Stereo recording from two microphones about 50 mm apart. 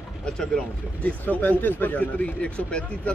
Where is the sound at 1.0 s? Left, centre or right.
Left.